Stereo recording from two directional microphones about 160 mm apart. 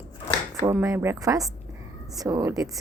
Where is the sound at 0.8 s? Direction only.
15° right (ahead or behind).